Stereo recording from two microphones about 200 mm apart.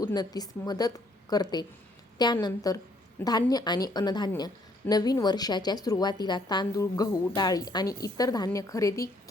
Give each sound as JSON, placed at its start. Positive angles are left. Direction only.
{"t": 0.0, "sound": "speech", "side_deg": 20}